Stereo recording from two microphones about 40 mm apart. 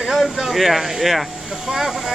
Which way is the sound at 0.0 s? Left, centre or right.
Centre.